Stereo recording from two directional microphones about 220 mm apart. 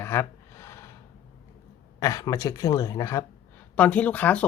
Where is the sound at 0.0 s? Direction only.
10° left (ahead or behind).